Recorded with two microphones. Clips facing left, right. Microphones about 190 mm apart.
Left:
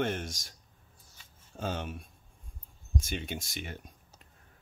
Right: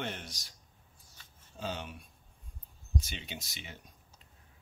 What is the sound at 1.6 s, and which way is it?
Speech, 50° left (ahead or behind).